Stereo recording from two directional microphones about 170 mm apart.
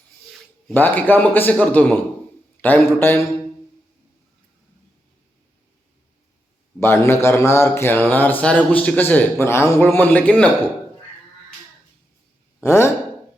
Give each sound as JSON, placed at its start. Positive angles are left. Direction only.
{"t": 0.7, "sound": "speech", "side_deg": 10}
{"t": 6.7, "sound": "speech", "side_deg": 15}
{"t": 12.6, "sound": "speech", "side_deg": 15}